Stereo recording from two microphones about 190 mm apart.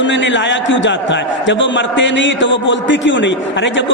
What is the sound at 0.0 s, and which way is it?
A man's voice, 75° left (ahead or behind).